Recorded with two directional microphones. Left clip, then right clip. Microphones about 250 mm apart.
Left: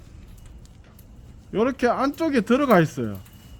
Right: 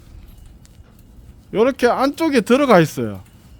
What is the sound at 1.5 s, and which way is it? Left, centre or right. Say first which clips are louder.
Speech: right 6 dB; right.